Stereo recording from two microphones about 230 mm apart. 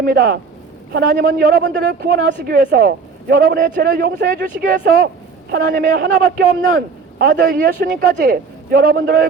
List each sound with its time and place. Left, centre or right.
0.0 s a man's voice: right